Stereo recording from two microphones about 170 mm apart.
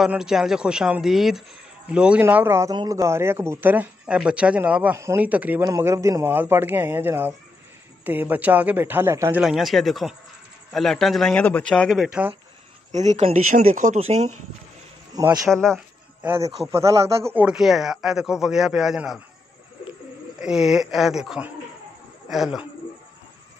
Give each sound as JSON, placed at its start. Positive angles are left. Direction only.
{"t": 0.0, "sound": "speech", "side_deg": -5}
{"t": 9.4, "sound": "speech", "side_deg": 0}
{"t": 12.9, "sound": "speech", "side_deg": -40}
{"t": 15.1, "sound": "speech", "side_deg": -20}
{"t": 15.4, "sound": "speech", "side_deg": 5}
{"t": 16.7, "sound": "speech", "side_deg": -15}
{"t": 20.3, "sound": "speech", "side_deg": -5}